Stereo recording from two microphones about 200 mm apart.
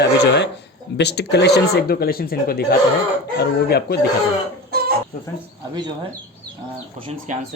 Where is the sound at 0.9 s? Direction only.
55° left (ahead or behind).